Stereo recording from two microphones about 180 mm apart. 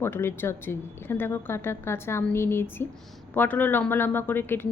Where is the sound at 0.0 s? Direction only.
15° left (ahead or behind).